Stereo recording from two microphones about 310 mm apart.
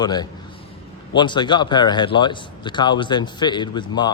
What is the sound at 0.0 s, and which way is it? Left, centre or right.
A man's voice, centre.